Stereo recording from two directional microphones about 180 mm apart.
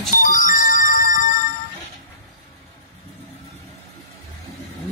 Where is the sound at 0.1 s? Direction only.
45° left (ahead or behind).